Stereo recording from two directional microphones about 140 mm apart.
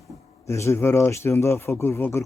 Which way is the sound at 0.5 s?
20° left (ahead or behind).